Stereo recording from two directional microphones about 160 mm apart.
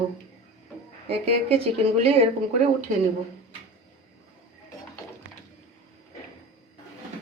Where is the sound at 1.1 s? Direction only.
40° right (ahead or behind).